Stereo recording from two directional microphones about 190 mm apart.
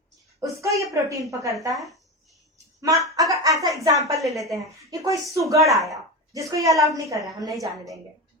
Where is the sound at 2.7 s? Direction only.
15° right (ahead or behind).